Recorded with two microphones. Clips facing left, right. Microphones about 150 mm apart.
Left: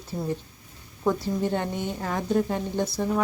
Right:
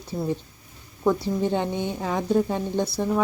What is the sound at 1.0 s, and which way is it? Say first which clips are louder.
A woman's voice: right 2 dB; 10° right (ahead or behind).